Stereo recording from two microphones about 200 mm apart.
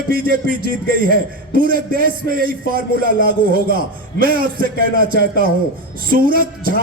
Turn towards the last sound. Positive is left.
turn(degrees=-45)  # may be behind; listen again after turning